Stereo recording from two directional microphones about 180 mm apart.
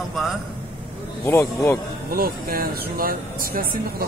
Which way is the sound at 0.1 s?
Centre (ahead or behind).